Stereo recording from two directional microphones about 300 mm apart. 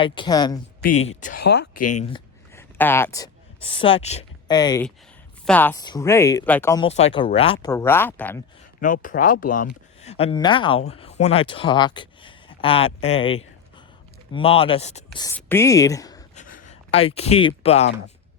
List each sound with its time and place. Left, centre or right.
0.0 s speech: centre
0.8 s speech: left
1.8 s speech: left; by 8.4 s centre
8.8 s speech: left
16.3 s a sound: left